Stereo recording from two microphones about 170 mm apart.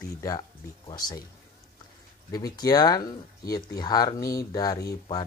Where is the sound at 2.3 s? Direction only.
20° left (ahead or behind).